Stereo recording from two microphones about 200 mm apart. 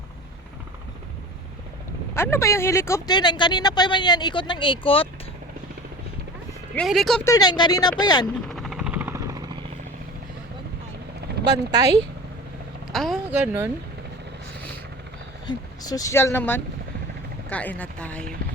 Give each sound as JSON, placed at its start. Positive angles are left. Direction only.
{"t": 2.1, "sound": "speech", "side_deg": 15}
{"t": 6.7, "sound": "speech", "side_deg": 0}
{"t": 7.3, "sound": "speech", "side_deg": 20}
{"t": 8.4, "sound": "helicopter", "side_deg": 0}
{"t": 11.5, "sound": "speech", "side_deg": -20}
{"t": 12.9, "sound": "speech", "side_deg": 0}
{"t": 15.4, "sound": "speech", "side_deg": 20}